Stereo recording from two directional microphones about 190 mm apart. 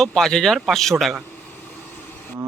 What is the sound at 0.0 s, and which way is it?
Speech, centre (ahead or behind).